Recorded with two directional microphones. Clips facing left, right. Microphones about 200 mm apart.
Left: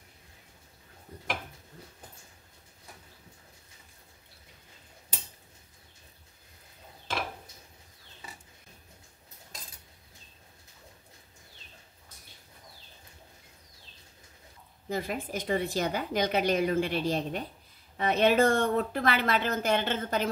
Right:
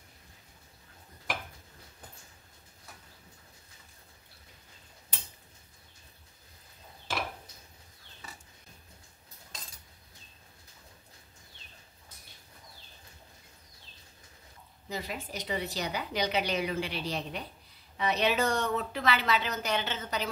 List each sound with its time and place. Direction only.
14.9 s a woman's voice: 50° left (ahead or behind)